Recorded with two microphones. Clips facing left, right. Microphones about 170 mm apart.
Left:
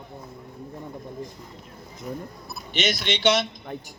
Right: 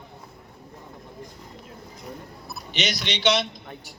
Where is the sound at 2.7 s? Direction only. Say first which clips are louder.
Left 3 dB; 50° left (ahead or behind).